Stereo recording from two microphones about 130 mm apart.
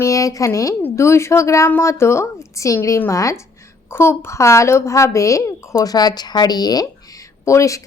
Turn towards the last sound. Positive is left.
turn(degrees=25)  # may be behind; listen again after turning